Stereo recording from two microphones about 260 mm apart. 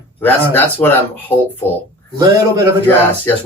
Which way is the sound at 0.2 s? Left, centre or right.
Centre.